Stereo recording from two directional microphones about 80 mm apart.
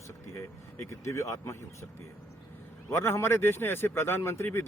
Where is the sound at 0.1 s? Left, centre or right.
Left.